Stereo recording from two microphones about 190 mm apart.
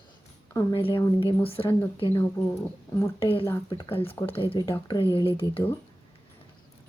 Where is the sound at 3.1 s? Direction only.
30° left (ahead or behind).